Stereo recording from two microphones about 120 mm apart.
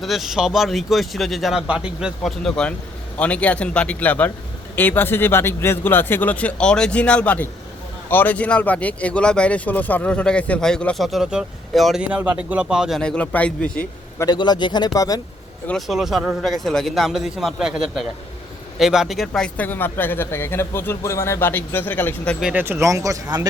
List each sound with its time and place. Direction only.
0.0 s speech: centre (ahead or behind)
12.0 s speech: 10° right (ahead or behind)
13.0 s speech: 10° left (ahead or behind)
14.2 s a man's voice: 35° left (ahead or behind)
15.9 s speech: 5° right (ahead or behind); by 22.4 s 15° left (ahead or behind)
22.5 s speech: 15° right (ahead or behind)